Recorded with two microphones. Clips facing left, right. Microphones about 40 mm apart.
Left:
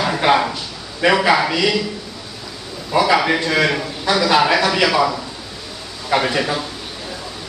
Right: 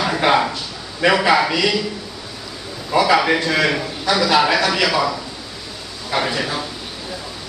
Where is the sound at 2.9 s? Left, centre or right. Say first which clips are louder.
Even; centre.